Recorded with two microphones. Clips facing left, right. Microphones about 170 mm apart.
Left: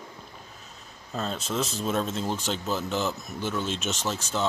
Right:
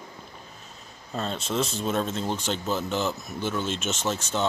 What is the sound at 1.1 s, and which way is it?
Speech, centre (ahead or behind).